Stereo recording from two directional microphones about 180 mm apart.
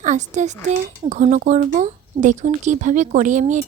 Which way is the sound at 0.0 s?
40° right (ahead or behind).